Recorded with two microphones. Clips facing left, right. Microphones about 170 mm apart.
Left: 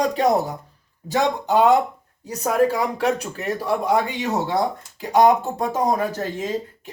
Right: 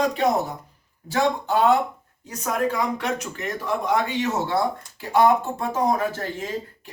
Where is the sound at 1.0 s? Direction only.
15° left (ahead or behind).